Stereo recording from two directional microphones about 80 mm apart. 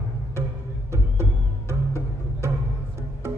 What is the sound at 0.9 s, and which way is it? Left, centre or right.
Music, right.